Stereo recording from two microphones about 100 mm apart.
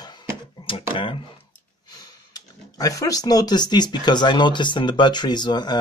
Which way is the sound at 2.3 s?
35° left (ahead or behind).